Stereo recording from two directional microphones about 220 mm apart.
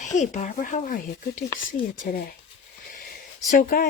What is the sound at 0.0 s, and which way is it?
Speech, 35° left (ahead or behind).